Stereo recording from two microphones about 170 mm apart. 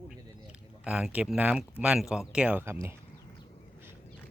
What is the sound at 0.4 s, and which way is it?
Speech, 5° right (ahead or behind).